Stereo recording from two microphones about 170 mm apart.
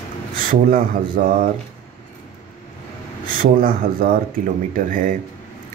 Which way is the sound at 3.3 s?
55° right (ahead or behind).